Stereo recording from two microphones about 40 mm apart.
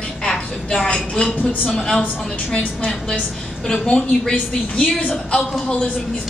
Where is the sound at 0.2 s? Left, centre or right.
Left.